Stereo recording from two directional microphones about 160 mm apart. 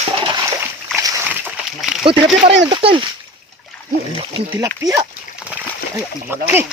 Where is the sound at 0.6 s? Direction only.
20° right (ahead or behind).